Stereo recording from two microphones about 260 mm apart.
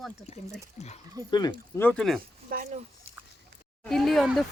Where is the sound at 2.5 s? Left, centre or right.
Right.